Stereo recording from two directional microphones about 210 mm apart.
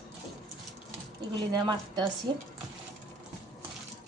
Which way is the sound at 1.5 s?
20° right (ahead or behind).